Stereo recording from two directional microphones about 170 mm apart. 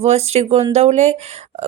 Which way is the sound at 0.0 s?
40° right (ahead or behind).